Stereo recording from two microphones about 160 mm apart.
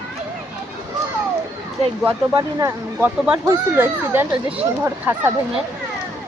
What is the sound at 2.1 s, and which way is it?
Speech, 30° right (ahead or behind).